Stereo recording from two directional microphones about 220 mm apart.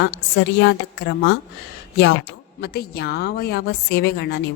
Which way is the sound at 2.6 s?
45° left (ahead or behind).